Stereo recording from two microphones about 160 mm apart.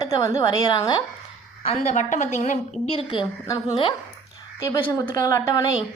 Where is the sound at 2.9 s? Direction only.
35° left (ahead or behind).